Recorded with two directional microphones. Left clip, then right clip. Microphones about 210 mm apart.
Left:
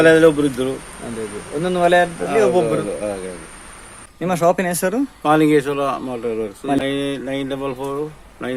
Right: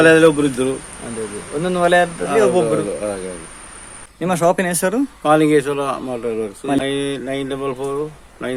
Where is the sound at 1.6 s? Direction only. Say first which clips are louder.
Even; centre (ahead or behind).